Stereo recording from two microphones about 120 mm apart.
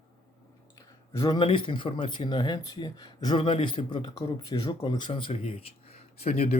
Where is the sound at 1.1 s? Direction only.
30° left (ahead or behind).